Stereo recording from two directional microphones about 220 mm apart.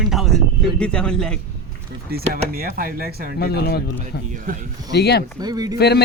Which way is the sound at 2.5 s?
40° right (ahead or behind).